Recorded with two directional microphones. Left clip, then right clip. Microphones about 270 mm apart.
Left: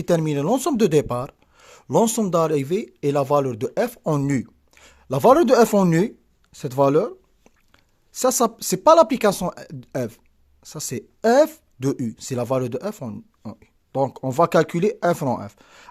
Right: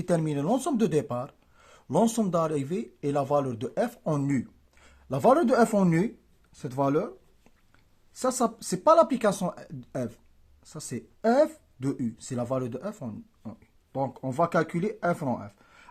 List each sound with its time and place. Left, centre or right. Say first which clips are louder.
0.0 s speech: left 7 dB; left